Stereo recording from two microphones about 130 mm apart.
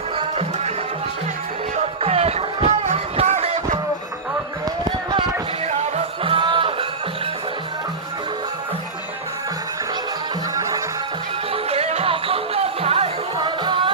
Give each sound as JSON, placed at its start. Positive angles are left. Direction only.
{"t": 0.2, "sound": "music", "side_deg": -50}
{"t": 2.0, "sound": "a sound", "side_deg": -50}
{"t": 5.6, "sound": "music", "side_deg": -60}
{"t": 6.2, "sound": "music", "side_deg": -40}
{"t": 10.5, "sound": "music", "side_deg": -25}
{"t": 11.5, "sound": "music", "side_deg": -50}